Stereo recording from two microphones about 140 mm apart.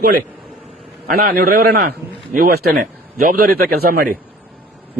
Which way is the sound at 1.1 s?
90° right.